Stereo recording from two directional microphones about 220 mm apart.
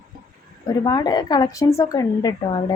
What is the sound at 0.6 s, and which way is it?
Speech, 20° left (ahead or behind).